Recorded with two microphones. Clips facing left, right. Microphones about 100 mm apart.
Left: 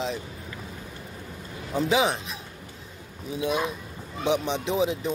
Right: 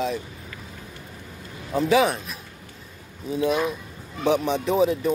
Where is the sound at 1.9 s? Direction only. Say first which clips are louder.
Right 4 dB; 20° left (ahead or behind).